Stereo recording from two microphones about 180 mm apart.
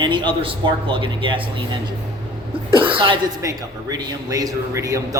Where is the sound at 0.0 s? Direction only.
25° right (ahead or behind).